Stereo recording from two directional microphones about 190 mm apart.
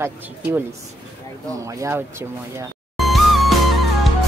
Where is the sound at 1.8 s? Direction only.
15° right (ahead or behind).